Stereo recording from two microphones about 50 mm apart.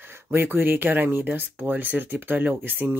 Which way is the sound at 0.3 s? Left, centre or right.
Right.